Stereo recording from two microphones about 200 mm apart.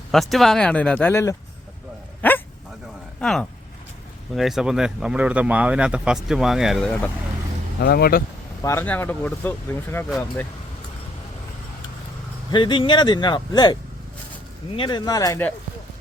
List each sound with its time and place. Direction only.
0.1 s speech: centre (ahead or behind)
2.2 s dog: 10° left (ahead or behind)
3.2 s speech: centre (ahead or behind)
7.8 s speech: 50° left (ahead or behind)
8.6 s speech: 10° left (ahead or behind)
12.5 s speech: 25° left (ahead or behind)
14.8 s speech: 20° left (ahead or behind)